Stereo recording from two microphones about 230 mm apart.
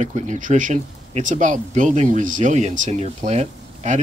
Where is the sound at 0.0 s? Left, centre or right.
Right.